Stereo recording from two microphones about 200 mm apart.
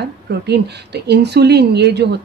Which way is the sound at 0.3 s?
55° right (ahead or behind).